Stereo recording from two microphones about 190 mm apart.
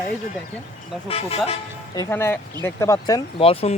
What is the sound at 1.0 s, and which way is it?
Speech, 30° left (ahead or behind).